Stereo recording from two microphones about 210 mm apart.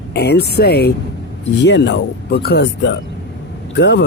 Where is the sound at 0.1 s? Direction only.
50° left (ahead or behind).